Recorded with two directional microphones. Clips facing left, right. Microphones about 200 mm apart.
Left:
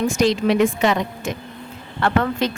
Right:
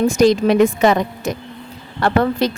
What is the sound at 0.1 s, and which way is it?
Speech, 40° right (ahead or behind).